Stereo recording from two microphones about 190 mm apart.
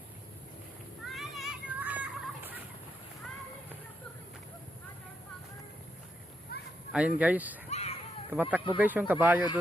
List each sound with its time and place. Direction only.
1.0 s children playing: centre (ahead or behind)
6.5 s a sound: 55° left (ahead or behind)
6.9 s speech: 5° right (ahead or behind)
7.7 s children playing: 35° left (ahead or behind)
8.4 s speech: 10° right (ahead or behind)